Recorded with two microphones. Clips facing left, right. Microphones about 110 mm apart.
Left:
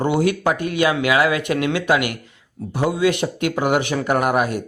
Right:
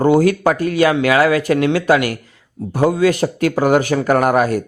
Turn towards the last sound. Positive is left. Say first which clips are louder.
# right 5 dB
turn(degrees=-40)  # may be behind; listen again after turning